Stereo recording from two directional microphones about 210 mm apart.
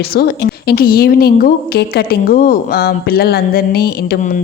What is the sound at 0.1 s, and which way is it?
A woman's voice, 50° left (ahead or behind).